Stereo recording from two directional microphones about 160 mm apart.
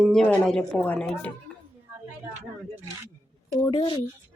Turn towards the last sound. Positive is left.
turn(degrees=30)  # may be behind; listen again after turning